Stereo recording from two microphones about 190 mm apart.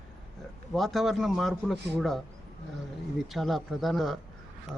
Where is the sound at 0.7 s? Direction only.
Centre (ahead or behind).